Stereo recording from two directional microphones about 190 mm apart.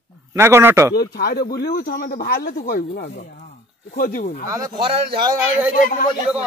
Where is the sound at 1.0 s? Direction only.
55° left (ahead or behind).